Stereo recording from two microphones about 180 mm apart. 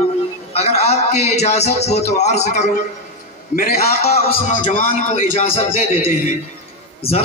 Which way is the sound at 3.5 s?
50° left (ahead or behind).